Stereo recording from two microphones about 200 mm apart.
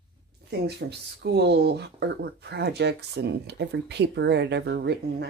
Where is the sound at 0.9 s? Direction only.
55° right (ahead or behind).